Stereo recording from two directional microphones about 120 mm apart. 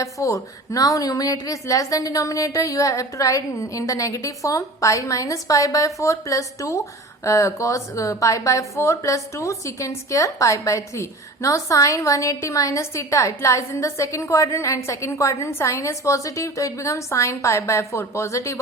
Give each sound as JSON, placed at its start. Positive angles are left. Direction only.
{"t": 0.0, "sound": "a woman's voice", "side_deg": 25}